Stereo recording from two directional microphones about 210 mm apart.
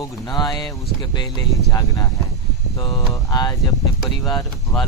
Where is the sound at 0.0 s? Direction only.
20° left (ahead or behind).